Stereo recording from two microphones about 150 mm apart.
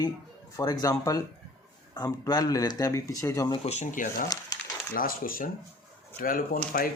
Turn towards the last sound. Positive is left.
turn(degrees=75)  # may be behind; listen again after turning